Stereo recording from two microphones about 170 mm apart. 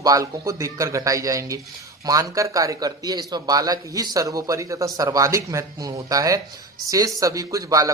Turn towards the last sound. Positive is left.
turn(degrees=-20)  # may be behind; listen again after turning